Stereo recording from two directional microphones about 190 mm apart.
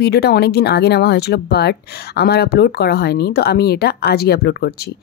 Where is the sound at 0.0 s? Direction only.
60° left (ahead or behind).